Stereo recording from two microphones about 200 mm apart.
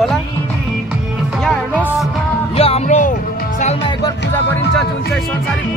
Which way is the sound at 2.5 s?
30° left (ahead or behind).